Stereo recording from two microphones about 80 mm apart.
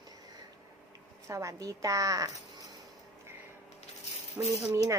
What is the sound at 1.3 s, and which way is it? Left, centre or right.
A woman's voice, right.